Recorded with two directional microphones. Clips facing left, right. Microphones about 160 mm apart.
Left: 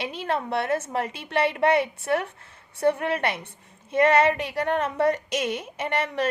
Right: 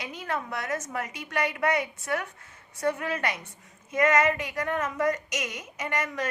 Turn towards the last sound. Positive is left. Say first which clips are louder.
# left 4 dB
turn(degrees=30)  # may be behind; listen again after turning